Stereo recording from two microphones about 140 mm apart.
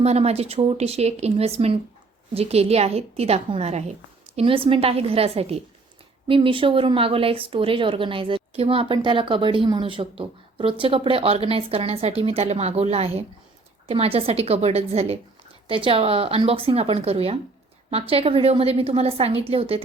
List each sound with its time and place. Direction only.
0.0 s speech: 50° right (ahead or behind)
4.4 s speech: 40° right (ahead or behind)